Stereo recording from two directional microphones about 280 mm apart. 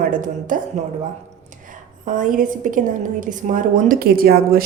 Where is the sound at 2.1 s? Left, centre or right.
Right.